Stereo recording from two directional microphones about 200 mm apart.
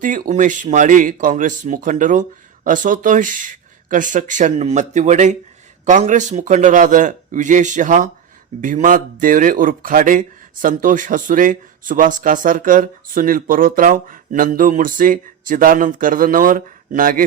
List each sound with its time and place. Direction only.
0.0 s speech: 40° right (ahead or behind)